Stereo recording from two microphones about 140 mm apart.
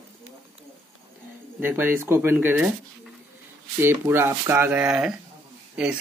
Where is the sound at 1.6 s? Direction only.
15° right (ahead or behind).